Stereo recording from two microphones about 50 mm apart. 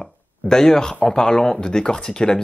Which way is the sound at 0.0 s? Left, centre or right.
Centre.